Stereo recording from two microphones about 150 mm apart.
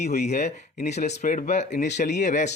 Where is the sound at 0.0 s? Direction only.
50° left (ahead or behind).